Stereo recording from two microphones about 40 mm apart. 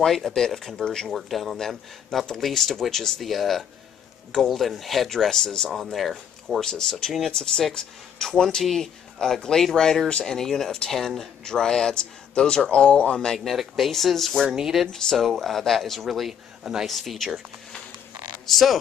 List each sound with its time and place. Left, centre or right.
0.0 s speech: centre
1.1 s speech: centre
6.6 s speech: centre
13.4 s speech: centre
16.1 s speech: centre
18.5 s speech: centre